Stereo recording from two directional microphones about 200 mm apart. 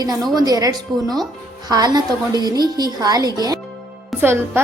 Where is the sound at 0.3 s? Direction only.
20° right (ahead or behind).